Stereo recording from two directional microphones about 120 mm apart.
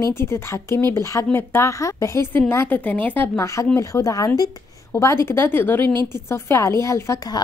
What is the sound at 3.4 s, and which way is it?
A woman's voice, 25° left (ahead or behind).